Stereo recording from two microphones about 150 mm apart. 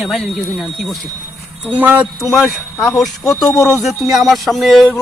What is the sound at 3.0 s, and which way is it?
Speech, centre (ahead or behind).